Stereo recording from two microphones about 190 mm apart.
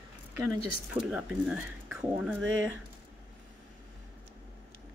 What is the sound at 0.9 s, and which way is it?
Speech, 5° right (ahead or behind).